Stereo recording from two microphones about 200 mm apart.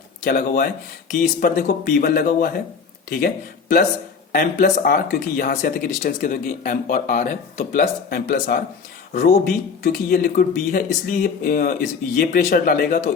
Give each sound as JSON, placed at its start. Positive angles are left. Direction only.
{"t": 0.3, "sound": "speech", "side_deg": 45}